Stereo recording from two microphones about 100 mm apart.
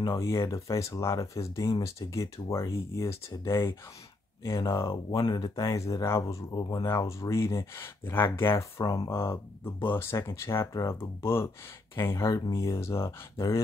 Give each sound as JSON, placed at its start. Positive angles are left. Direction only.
{"t": 0.0, "sound": "speech", "side_deg": 30}
{"t": 5.2, "sound": "speech", "side_deg": 40}
{"t": 6.9, "sound": "speech", "side_deg": 30}
{"t": 8.8, "sound": "speech", "side_deg": 40}
{"t": 9.1, "sound": "speech", "side_deg": 25}